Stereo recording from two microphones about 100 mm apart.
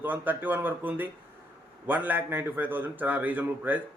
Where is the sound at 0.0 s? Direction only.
20° right (ahead or behind).